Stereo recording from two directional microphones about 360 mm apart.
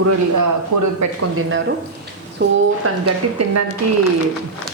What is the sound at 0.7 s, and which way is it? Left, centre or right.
Speech, right.